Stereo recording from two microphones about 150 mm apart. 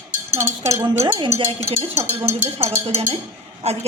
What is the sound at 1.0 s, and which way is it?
Speech, 30° right (ahead or behind).